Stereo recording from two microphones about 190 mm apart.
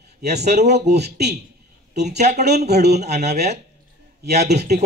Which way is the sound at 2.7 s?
35° right (ahead or behind).